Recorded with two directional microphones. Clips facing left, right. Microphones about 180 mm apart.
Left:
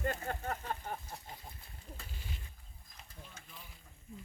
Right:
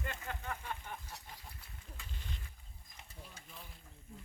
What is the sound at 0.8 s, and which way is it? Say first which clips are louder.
Chicken: left 5 dB; 35° left (ahead or behind).